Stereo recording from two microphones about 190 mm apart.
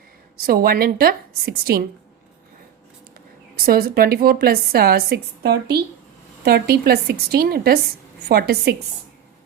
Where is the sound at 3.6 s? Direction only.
50° right (ahead or behind).